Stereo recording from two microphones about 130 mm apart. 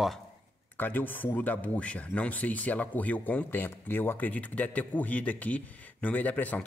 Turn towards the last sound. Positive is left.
turn(degrees=10)  # may be behind; listen again after turning